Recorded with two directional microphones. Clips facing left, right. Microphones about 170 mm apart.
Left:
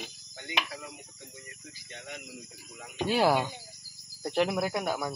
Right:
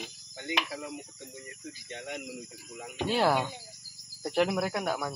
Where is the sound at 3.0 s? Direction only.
5° left (ahead or behind).